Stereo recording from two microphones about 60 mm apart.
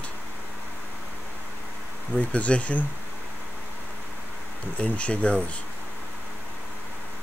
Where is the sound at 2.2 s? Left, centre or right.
Left.